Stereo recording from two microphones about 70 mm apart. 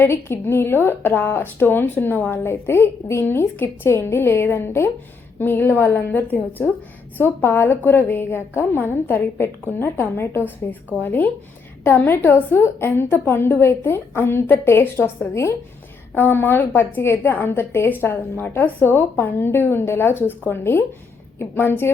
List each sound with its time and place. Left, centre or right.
0.0 s a woman's voice: left